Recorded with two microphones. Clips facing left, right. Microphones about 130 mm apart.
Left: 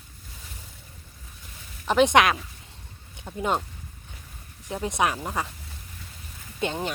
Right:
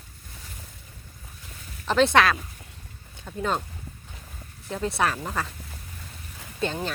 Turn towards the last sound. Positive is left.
turn(degrees=15)  # may be behind; listen again after turning